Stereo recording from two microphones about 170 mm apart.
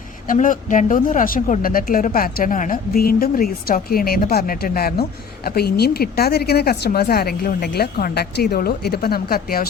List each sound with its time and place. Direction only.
0.3 s a woman's voice: 50° left (ahead or behind)